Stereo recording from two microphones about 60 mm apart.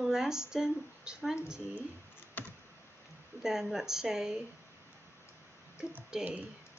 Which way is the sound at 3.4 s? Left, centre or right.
Centre.